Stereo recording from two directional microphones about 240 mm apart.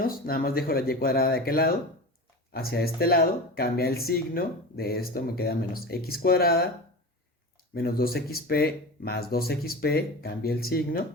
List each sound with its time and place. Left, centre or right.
0.0 s speech: left
7.7 s speech: left